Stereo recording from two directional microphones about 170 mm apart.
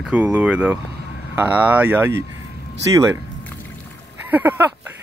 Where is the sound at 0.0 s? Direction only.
10° right (ahead or behind).